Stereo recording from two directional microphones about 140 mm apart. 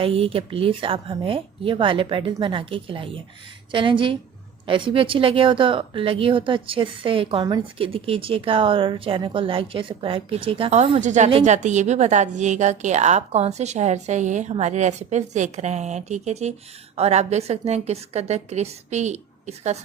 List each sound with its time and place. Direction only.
0.0 s speech: 45° right (ahead or behind)
11.0 s a woman's voice: 60° right (ahead or behind)
11.3 s a woman's voice: 50° right (ahead or behind)